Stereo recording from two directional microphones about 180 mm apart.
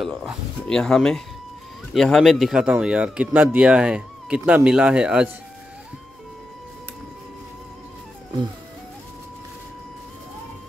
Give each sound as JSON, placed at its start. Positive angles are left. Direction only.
{"t": 0.0, "sound": "speech", "side_deg": 0}